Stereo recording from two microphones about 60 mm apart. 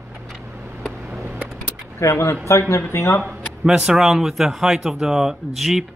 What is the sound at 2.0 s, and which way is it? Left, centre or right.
Speech, left.